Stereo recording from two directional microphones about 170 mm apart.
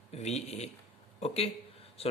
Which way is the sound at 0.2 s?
40° left (ahead or behind).